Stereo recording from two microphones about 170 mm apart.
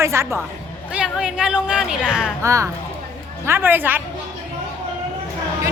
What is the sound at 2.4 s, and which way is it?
A woman's voice, 15° right (ahead or behind).